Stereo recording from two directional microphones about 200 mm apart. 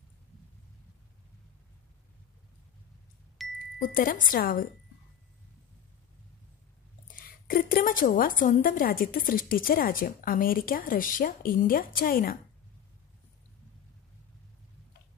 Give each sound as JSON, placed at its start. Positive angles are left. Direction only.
{"t": 3.4, "sound": "chime", "side_deg": 0}
{"t": 3.8, "sound": "a woman's voice", "side_deg": 45}
{"t": 7.2, "sound": "a woman's voice", "side_deg": 45}